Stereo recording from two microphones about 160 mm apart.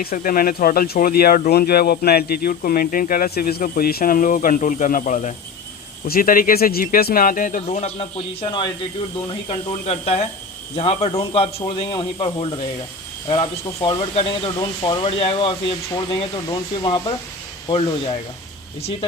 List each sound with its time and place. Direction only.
0.0 s speech: 65° left (ahead or behind); by 8.6 s 40° left (ahead or behind)
9.8 s a man's voice: 40° left (ahead or behind)
13.8 s a man's voice: 35° left (ahead or behind)